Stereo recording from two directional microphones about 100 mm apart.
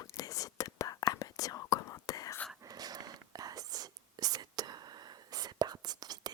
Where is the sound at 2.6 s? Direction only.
40° right (ahead or behind).